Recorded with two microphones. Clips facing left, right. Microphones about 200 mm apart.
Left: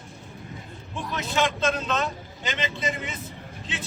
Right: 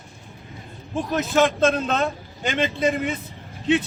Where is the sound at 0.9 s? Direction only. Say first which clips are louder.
Right 7 dB; 45° right (ahead or behind).